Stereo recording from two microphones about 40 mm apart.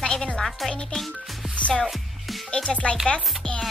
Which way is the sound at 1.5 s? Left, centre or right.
Left.